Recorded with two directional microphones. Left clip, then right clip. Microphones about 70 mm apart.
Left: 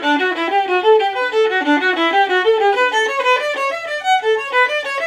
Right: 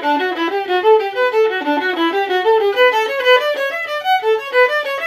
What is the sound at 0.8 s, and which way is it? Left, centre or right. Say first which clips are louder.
Music: right 4 dB; right.